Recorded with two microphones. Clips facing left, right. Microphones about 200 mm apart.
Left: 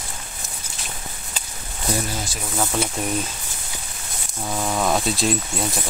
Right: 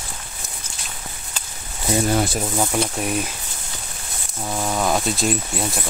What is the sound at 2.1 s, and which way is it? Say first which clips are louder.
Speech: right 11 dB; 60° right (ahead or behind).